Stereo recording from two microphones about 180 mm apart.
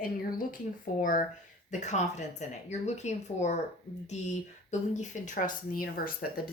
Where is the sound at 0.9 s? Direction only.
50° left (ahead or behind).